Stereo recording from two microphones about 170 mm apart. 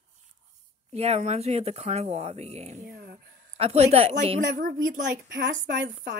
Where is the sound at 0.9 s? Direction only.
40° right (ahead or behind).